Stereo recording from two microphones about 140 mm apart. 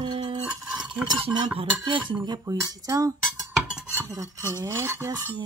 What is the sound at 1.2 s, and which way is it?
Speech, 30° right (ahead or behind).